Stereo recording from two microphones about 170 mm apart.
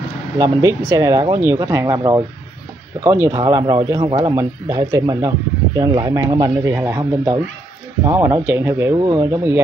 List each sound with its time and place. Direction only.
0.4 s speech: 15° right (ahead or behind)